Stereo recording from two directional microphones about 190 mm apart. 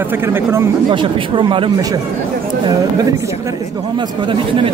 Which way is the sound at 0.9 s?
25° right (ahead or behind).